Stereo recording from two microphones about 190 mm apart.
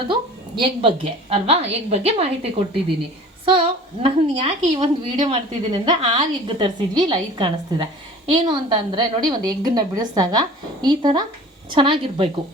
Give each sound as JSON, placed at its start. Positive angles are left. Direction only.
{"t": 0.1, "sound": "a woman's voice", "side_deg": -25}